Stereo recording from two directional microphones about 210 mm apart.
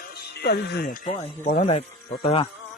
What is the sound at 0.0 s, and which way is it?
Music, 50° left (ahead or behind).